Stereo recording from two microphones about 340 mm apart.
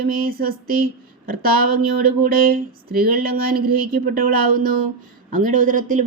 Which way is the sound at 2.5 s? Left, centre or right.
Right.